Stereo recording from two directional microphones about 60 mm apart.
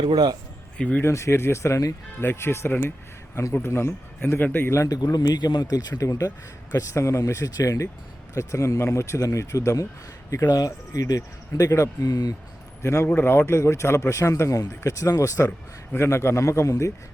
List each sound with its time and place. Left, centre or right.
0.8 s speech: left
1.0 s speech: left
2.2 s a man's voice: left
4.3 s speech: left
4.9 s speech: left
8.4 s speech: left
10.5 s speech: left
12.8 s a man's voice: left
13.1 s speech: left
13.4 s a man's voice: left
14.5 s speech: left
15.4 s a man's voice: left